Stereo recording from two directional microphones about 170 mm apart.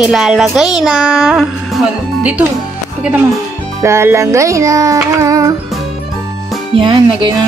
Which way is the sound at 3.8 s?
15° right (ahead or behind).